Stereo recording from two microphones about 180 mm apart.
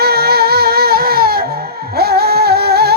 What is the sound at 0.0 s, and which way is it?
Music, 60° right (ahead or behind).